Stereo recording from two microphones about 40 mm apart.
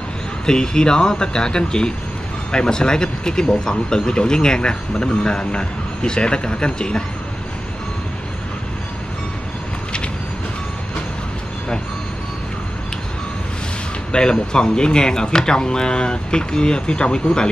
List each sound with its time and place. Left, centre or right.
0.5 s speech: centre
14.1 s speech: left